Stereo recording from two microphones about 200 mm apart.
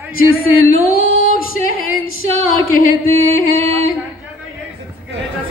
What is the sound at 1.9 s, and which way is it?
Female singing, 90° right.